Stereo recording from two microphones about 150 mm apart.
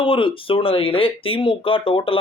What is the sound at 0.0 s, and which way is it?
Speech, 35° left (ahead or behind).